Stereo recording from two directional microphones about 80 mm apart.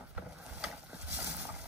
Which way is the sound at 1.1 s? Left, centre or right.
Right.